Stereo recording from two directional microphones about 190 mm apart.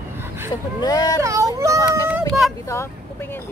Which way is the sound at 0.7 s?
20° left (ahead or behind).